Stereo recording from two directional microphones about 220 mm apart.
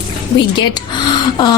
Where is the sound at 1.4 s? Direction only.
20° left (ahead or behind).